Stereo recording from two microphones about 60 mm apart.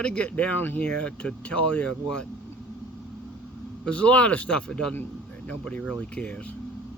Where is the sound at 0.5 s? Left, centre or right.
Left.